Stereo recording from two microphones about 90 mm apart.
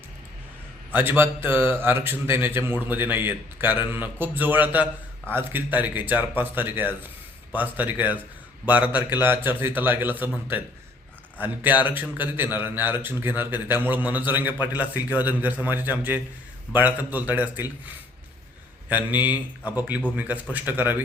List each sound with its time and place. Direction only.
0.9 s a man's voice: 20° right (ahead or behind)
18.9 s a man's voice: 20° right (ahead or behind)